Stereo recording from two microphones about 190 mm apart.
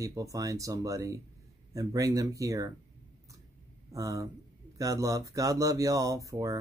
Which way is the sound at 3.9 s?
15° right (ahead or behind).